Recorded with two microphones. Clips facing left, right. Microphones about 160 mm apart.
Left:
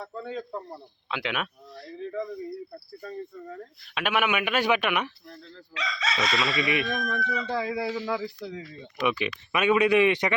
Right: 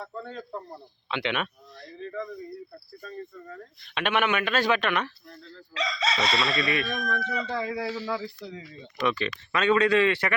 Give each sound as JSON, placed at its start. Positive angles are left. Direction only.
{"t": 0.0, "sound": "speech", "side_deg": 5}
{"t": 3.8, "sound": "speech", "side_deg": 5}
{"t": 5.7, "sound": "chicken", "side_deg": -35}
{"t": 6.4, "sound": "speech", "side_deg": 15}